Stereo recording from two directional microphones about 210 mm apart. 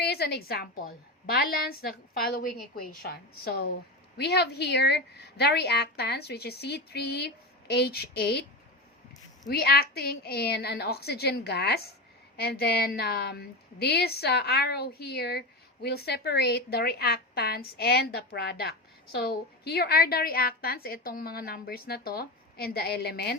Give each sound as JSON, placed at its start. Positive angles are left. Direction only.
{"t": 0.0, "sound": "a woman's voice", "side_deg": 50}
{"t": 9.5, "sound": "a woman's voice", "side_deg": 50}